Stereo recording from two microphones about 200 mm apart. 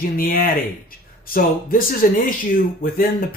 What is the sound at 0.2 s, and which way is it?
Speech, 45° left (ahead or behind).